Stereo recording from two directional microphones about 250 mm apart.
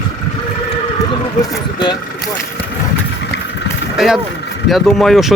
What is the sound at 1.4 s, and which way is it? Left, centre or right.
Speech, centre.